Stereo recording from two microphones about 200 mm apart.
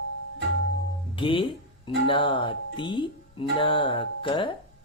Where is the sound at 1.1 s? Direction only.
25° left (ahead or behind).